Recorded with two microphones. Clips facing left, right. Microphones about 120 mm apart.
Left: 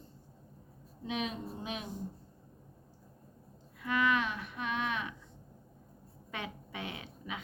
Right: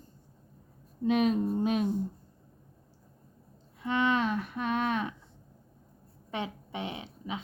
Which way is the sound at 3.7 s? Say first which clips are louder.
Right 3 dB; 25° right (ahead or behind).